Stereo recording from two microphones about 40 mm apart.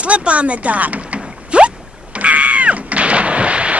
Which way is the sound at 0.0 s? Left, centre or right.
Right.